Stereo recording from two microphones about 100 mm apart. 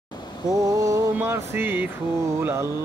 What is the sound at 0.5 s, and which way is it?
Mantra, 35° right (ahead or behind).